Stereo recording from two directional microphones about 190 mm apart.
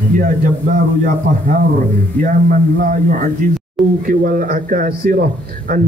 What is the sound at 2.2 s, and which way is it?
A man's voice, 45° right (ahead or behind).